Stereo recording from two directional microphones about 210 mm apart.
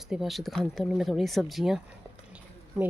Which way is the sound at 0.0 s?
Centre (ahead or behind).